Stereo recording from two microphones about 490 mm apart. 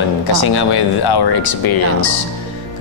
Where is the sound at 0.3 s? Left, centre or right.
Left.